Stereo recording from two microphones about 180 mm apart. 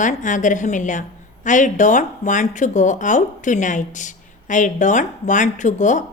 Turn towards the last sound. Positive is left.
turn(degrees=45)  # may be behind; listen again after turning